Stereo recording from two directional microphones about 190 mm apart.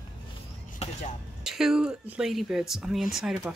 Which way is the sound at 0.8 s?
35° left (ahead or behind).